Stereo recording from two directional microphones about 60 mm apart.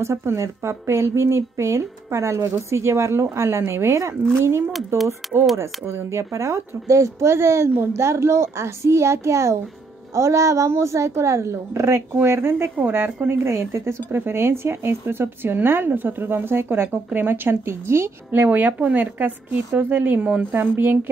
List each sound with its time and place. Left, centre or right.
0.0 s a woman's voice: right
5.2 s speech: centre
5.6 s a woman's voice: right
12.2 s a woman's voice: right